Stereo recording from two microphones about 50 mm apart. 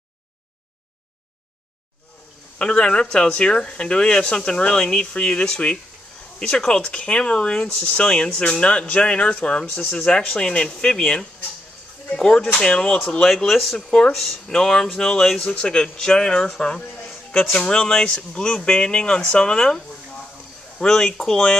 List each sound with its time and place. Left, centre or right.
2.6 s speech: centre
10.3 s speech: centre
13.5 s speech: centre
14.1 s speech: centre